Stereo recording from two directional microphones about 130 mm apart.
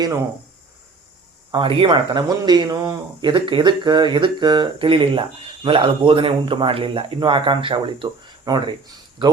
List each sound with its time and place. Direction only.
1.5 s speech: 35° right (ahead or behind)